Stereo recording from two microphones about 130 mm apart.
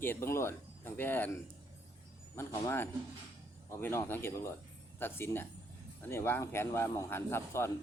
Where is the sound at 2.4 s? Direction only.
20° left (ahead or behind).